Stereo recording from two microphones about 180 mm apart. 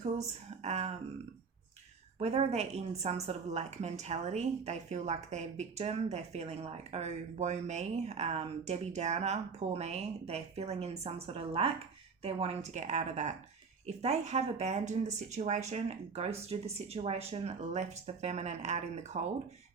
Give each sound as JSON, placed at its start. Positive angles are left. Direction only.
{"t": 0.2, "sound": "speech", "side_deg": -40}
{"t": 2.1, "sound": "speech", "side_deg": -35}